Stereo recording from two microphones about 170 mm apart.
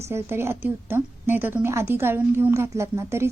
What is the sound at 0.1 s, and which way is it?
Speech, 15° right (ahead or behind).